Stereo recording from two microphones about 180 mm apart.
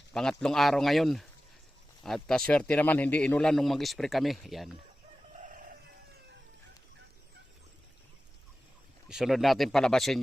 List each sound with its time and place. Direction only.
0.1 s speech: 5° left (ahead or behind)
5.4 s chicken: 45° right (ahead or behind)
9.0 s speech: centre (ahead or behind)